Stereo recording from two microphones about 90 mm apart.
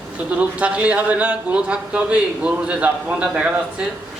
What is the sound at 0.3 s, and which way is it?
A man's voice, 15° right (ahead or behind).